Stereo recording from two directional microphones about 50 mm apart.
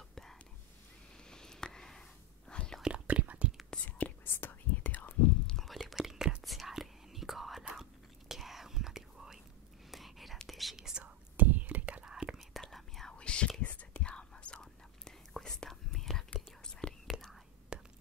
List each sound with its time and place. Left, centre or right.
0.1 s whispering: centre
3.1 s whispering: right
3.7 s whispering: left
4.2 s whispering: left
5.6 s whispering: centre
5.9 s whispering: centre
6.4 s whispering: centre
10.8 s whispering: centre
11.1 s whispering: right
12.1 s whispering: centre
12.4 s whispering: centre
13.2 s whispering: left
16.8 s whispering: left
17.7 s whispering: centre